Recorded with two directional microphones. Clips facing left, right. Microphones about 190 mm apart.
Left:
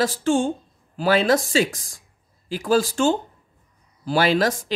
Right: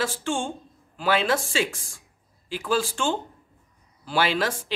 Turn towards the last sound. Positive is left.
turn(degrees=40)  # may be behind; listen again after turning